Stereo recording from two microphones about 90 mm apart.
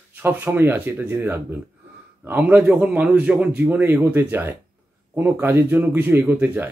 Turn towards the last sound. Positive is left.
turn(degrees=-20)  # may be behind; listen again after turning